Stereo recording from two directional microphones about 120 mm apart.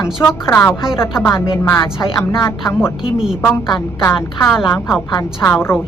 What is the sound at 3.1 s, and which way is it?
Speech, 5° right (ahead or behind).